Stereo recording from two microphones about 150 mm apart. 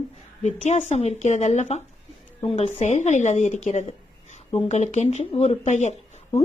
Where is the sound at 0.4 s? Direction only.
50° left (ahead or behind).